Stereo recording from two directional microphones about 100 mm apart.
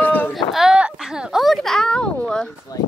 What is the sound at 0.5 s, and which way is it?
Speech, 5° right (ahead or behind).